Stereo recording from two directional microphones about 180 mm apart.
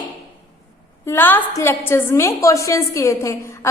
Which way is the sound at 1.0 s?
10° left (ahead or behind).